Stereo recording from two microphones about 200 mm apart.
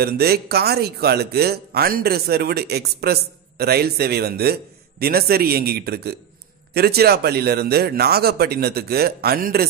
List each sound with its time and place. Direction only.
0.0 s speech: 50° right (ahead or behind)